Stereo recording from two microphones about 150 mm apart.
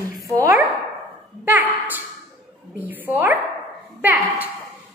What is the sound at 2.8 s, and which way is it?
A woman's voice, 10° right (ahead or behind).